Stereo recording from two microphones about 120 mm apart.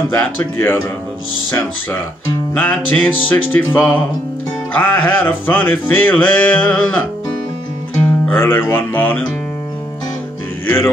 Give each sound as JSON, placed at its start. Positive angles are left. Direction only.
{"t": 0.1, "sound": "music", "side_deg": 15}
{"t": 8.3, "sound": "music", "side_deg": 15}